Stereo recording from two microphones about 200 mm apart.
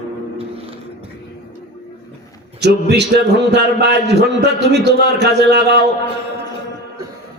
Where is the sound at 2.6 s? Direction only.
55° right (ahead or behind).